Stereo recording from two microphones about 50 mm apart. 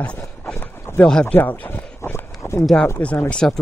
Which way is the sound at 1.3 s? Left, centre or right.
Left.